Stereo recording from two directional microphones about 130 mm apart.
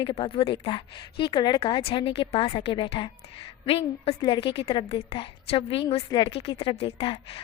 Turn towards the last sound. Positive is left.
turn(degrees=40)  # may be behind; listen again after turning